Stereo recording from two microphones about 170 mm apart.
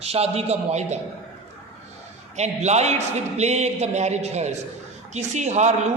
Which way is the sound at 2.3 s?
40° right (ahead or behind).